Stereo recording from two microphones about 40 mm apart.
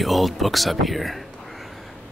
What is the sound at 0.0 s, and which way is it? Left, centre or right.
Speech, centre.